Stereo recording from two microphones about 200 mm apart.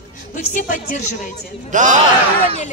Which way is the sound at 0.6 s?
40° left (ahead or behind).